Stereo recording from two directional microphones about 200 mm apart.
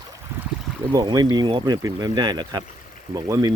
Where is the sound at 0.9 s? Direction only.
20° right (ahead or behind).